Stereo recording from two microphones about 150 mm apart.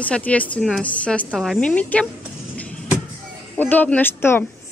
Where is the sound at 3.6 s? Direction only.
10° left (ahead or behind).